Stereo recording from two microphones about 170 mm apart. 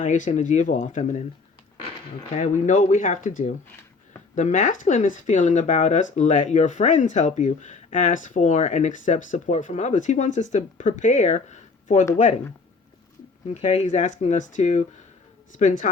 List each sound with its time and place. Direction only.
0.0 s speech: 45° left (ahead or behind)
2.3 s speech: 45° left (ahead or behind)
13.5 s speech: 45° left (ahead or behind)